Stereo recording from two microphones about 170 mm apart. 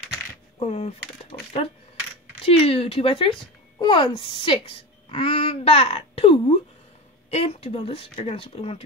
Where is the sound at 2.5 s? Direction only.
35° left (ahead or behind).